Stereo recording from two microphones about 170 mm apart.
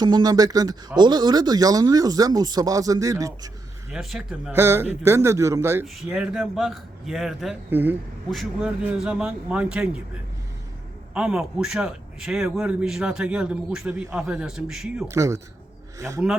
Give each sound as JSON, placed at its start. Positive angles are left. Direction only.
{"t": 0.0, "sound": "speech", "side_deg": -25}
{"t": 3.9, "sound": "a man's voice", "side_deg": -5}
{"t": 4.5, "sound": "a man's voice", "side_deg": -15}
{"t": 7.7, "sound": "a man's voice", "side_deg": -10}
{"t": 11.1, "sound": "a man's voice", "side_deg": -5}
{"t": 15.0, "sound": "speech", "side_deg": -15}